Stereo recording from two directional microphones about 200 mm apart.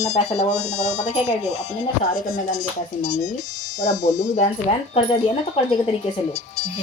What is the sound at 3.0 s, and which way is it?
Speech, 45° left (ahead or behind).